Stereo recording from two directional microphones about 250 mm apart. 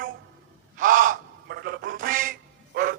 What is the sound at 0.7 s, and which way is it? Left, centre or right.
Quack, right.